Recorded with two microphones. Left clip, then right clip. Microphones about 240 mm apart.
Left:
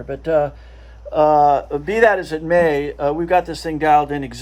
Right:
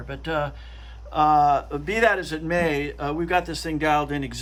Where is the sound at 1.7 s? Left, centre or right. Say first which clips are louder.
Left 6 dB; centre.